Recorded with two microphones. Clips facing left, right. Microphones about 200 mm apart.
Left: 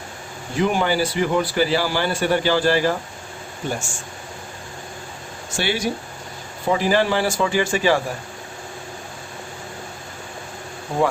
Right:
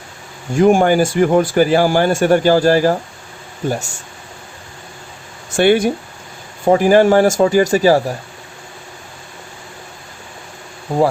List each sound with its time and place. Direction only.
0.5 s a man's voice: 45° right (ahead or behind)
5.5 s a man's voice: 55° right (ahead or behind)